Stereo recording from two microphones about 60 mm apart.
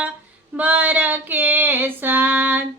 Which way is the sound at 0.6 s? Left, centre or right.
Right.